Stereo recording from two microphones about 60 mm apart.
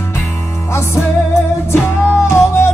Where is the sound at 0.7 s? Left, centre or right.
Left.